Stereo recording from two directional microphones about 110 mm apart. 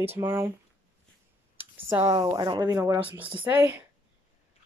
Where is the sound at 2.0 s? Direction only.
40° right (ahead or behind).